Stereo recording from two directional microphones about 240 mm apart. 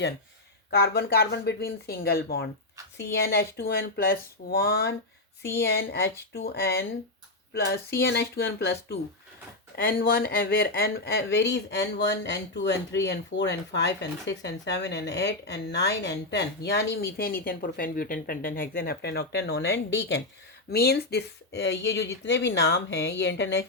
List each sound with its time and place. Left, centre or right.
0.8 s speech: left